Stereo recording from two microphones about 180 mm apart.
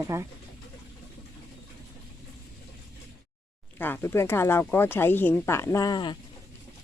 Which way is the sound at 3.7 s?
10° left (ahead or behind).